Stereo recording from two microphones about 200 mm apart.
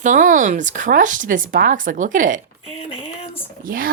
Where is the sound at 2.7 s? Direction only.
30° left (ahead or behind).